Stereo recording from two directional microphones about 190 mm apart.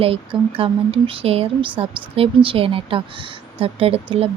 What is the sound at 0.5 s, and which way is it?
A woman's voice, 30° right (ahead or behind).